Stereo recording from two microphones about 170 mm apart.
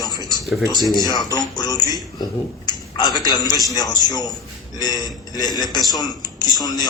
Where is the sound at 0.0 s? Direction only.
25° left (ahead or behind).